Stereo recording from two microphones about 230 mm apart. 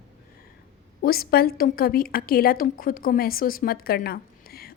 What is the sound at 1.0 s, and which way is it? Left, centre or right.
A woman's voice, left.